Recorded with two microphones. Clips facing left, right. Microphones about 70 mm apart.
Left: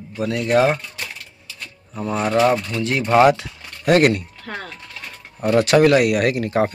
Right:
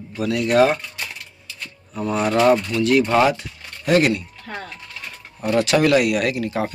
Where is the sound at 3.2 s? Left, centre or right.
Left.